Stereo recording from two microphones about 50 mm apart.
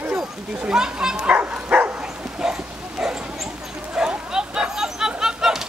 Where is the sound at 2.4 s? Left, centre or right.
Centre.